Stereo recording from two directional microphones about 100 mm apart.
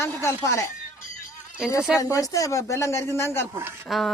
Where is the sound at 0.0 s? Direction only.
25° left (ahead or behind).